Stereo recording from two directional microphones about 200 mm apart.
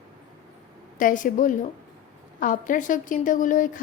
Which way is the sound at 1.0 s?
40° left (ahead or behind).